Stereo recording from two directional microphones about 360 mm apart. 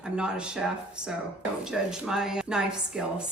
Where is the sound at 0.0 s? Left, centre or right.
Centre.